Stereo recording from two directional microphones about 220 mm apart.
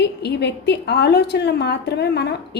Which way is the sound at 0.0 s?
50° left (ahead or behind).